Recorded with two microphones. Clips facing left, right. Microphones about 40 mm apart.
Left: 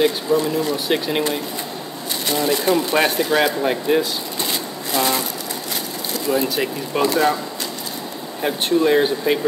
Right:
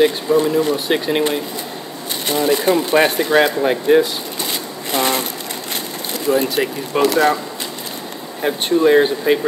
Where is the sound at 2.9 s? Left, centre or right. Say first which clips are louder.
Right 4 dB; centre.